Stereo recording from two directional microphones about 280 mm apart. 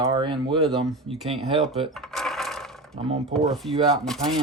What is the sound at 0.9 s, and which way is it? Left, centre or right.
Speech, centre.